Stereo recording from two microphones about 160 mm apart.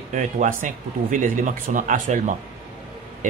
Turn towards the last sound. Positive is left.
turn(degrees=-50)  # may be behind; listen again after turning